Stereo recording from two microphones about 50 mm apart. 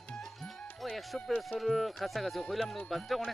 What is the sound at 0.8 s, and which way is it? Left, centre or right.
Speech, centre.